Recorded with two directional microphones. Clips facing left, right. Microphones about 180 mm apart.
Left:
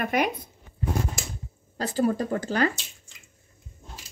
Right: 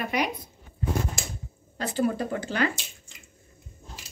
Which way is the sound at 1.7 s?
40° left (ahead or behind).